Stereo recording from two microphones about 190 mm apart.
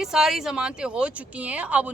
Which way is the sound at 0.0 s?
Centre (ahead or behind).